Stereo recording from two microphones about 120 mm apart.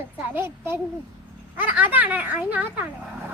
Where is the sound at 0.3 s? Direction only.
20° right (ahead or behind).